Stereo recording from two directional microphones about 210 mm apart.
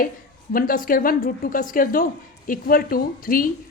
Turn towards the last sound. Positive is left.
turn(degrees=40)  # may be behind; listen again after turning